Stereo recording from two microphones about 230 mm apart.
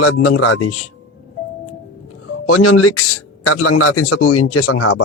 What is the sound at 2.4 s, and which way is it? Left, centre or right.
Speech, left.